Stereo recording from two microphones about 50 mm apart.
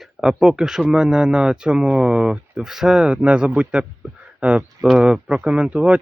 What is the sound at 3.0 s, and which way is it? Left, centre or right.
Speech, right.